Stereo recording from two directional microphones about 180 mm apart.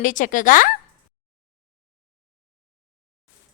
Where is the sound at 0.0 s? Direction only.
45° left (ahead or behind).